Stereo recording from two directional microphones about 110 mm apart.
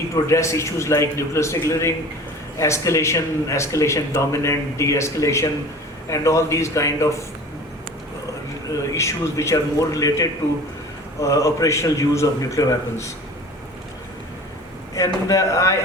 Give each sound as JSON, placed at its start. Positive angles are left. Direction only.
{"t": 0.3, "sound": "a man's voice", "side_deg": 25}
{"t": 2.6, "sound": "a man's voice", "side_deg": 25}
{"t": 8.9, "sound": "a man's voice", "side_deg": 30}
{"t": 14.9, "sound": "a man's voice", "side_deg": 30}